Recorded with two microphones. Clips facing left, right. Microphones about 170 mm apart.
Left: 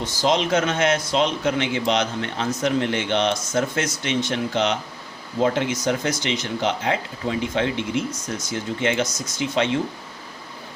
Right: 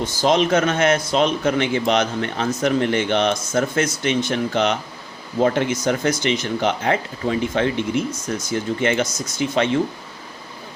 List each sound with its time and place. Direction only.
0.2 s speech: 50° right (ahead or behind)